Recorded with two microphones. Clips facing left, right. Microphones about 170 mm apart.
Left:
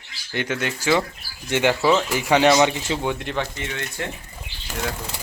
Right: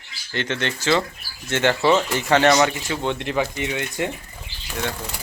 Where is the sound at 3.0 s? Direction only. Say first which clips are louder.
Right 1 dB; 5° left (ahead or behind).